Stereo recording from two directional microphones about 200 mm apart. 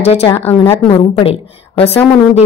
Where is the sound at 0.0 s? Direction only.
30° left (ahead or behind).